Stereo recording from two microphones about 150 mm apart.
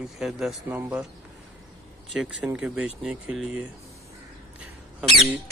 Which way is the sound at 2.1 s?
5° right (ahead or behind).